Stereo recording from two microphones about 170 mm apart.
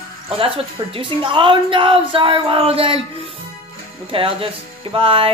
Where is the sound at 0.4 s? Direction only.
30° right (ahead or behind).